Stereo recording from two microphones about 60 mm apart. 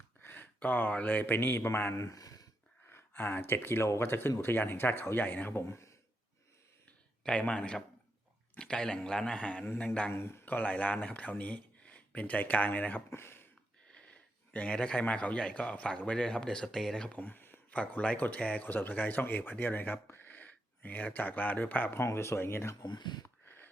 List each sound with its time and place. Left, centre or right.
0.2 s a sound: left
0.6 s speech: left
2.0 s speech: left
2.9 s speech: left
7.3 s speech: centre
10.1 s speech: left
10.4 s speech: left
13.1 s speech: left
13.9 s a sound: centre
14.8 s speech: centre
17.1 s a sound: left
17.7 s speech: left
22.1 s speech: left
23.2 s a sound: left